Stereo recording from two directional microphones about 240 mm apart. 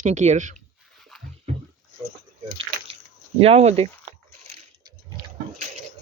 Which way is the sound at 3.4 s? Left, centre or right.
Right.